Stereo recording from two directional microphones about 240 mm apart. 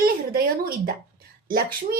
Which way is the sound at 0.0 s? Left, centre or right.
Right.